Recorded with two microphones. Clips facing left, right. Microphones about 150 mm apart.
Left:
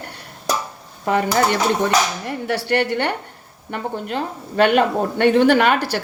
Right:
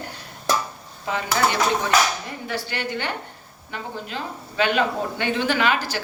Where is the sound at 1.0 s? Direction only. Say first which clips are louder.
Left 8 dB; 55° left (ahead or behind).